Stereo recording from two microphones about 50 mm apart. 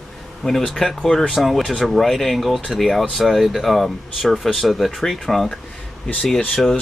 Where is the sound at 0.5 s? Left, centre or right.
Centre.